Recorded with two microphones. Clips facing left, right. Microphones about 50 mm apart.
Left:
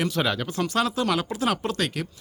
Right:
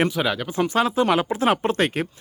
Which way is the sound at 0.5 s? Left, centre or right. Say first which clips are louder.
Right 7 dB; right.